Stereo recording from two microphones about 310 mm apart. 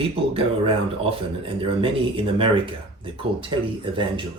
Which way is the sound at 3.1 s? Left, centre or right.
Centre.